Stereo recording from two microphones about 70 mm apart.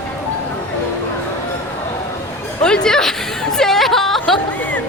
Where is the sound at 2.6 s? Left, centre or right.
Centre.